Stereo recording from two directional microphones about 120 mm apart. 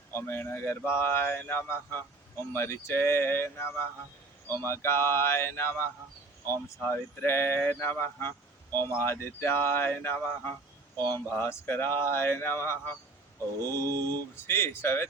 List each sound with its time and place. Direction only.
0.1 s speech: 20° left (ahead or behind)
13.6 s mantra: 35° right (ahead or behind)
14.3 s speech: 20° left (ahead or behind)